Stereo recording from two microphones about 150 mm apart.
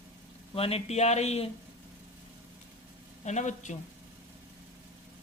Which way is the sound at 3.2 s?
50° left (ahead or behind).